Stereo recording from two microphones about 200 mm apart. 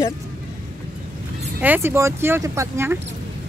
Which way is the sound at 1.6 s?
10° right (ahead or behind).